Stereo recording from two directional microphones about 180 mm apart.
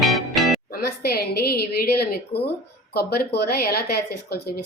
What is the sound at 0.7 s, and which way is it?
Speech, 60° left (ahead or behind).